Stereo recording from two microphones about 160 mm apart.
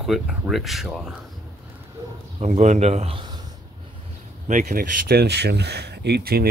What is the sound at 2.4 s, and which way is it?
Speech, 45° right (ahead or behind).